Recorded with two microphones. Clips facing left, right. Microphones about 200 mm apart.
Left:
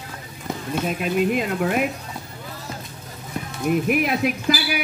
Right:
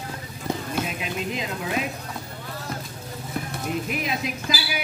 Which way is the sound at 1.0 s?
55° left (ahead or behind).